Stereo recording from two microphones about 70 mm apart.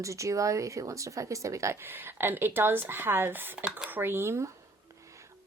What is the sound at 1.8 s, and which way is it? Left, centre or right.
Speech, right.